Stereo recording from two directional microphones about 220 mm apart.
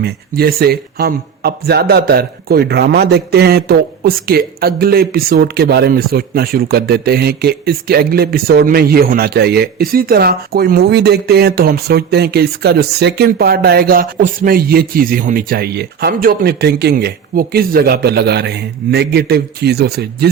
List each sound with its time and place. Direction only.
0.0 s speech: 45° right (ahead or behind)